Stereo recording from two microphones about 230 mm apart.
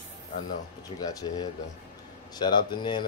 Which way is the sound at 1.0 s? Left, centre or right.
Centre.